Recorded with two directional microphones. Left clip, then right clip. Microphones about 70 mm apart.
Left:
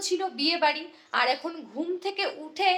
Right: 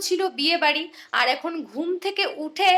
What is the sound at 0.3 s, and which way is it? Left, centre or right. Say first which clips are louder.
A woman's voice: right 3 dB; right.